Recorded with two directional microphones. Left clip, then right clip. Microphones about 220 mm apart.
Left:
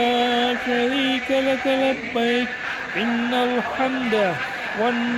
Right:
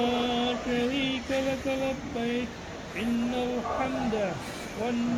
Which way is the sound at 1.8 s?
45° left (ahead or behind).